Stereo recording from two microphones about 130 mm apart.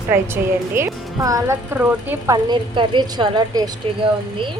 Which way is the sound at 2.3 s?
35° right (ahead or behind).